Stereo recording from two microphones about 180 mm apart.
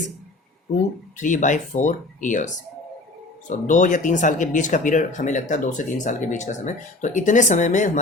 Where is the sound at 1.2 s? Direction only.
45° left (ahead or behind).